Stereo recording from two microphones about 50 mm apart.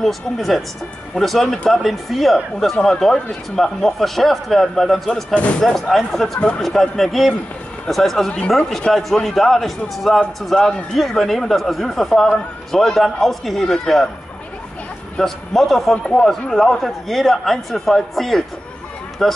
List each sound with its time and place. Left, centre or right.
0.0 s a man's voice: centre
5.3 s speech: left
5.8 s a man's voice: centre
15.1 s a man's voice: centre